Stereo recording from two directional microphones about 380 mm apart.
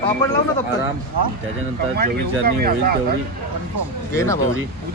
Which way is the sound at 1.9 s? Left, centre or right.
Right.